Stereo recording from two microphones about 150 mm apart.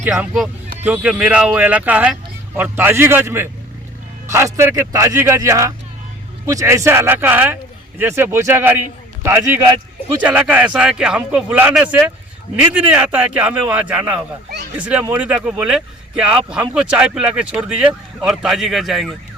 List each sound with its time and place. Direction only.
0.0 s a man's voice: 10° right (ahead or behind)